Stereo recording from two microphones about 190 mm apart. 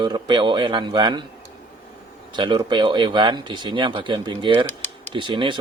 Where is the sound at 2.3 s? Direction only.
25° right (ahead or behind).